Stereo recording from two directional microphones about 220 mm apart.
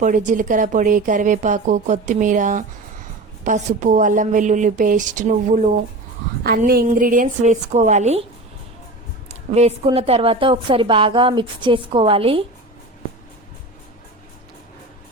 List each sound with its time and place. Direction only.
0.0 s speech: 35° right (ahead or behind)
9.3 s a woman's voice: 30° right (ahead or behind)